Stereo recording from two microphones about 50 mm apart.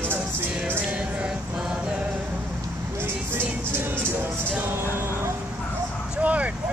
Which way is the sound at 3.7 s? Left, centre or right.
Right.